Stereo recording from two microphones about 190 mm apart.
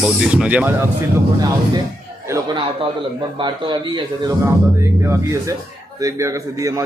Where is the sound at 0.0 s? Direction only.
5° right (ahead or behind).